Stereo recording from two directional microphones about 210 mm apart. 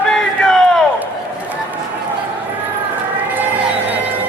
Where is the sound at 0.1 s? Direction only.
Centre (ahead or behind).